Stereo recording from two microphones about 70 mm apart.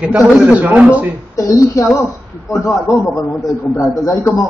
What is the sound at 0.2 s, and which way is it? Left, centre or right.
Speech, centre.